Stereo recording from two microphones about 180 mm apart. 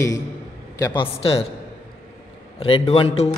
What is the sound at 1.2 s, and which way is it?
Speech, 30° left (ahead or behind).